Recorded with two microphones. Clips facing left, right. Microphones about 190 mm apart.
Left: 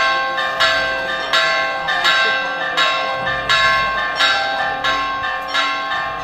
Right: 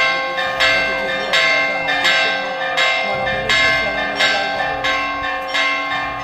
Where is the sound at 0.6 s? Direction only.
20° right (ahead or behind).